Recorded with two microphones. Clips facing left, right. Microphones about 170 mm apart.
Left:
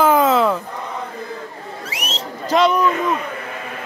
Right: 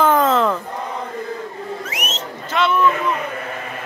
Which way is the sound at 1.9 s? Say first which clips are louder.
Right 1 dB; 35° left (ahead or behind).